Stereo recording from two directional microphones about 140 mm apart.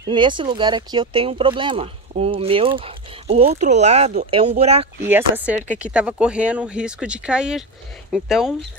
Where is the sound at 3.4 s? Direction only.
55° right (ahead or behind).